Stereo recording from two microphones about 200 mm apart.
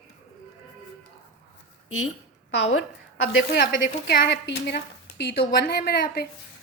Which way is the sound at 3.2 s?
55° left (ahead or behind).